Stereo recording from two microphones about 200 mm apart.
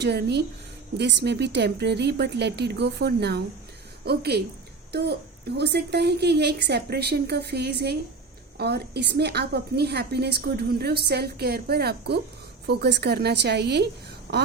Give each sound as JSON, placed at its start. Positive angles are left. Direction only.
{"t": 0.0, "sound": "a woman's voice", "side_deg": -55}